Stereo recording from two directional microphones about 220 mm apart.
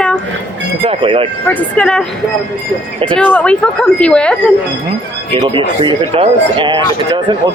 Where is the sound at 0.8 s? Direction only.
25° right (ahead or behind).